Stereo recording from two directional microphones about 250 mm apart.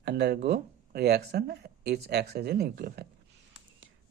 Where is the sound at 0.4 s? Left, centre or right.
Right.